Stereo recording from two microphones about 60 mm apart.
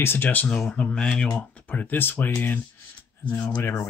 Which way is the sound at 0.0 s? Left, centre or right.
Left.